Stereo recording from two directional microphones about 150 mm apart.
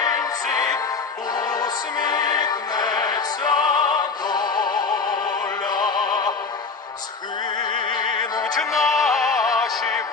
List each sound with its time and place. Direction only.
0.0 s music: 25° left (ahead or behind)
7.6 s music: 30° left (ahead or behind)
8.0 s music: 50° right (ahead or behind)
8.5 s music: centre (ahead or behind)